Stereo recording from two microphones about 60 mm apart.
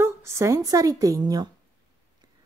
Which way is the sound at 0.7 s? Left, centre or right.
Right.